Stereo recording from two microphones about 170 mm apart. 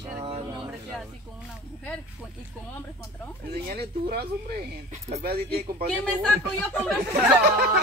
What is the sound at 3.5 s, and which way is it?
Speech, 70° right (ahead or behind).